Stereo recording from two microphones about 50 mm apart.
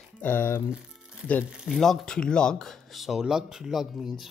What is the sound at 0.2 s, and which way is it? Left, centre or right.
Speech, left.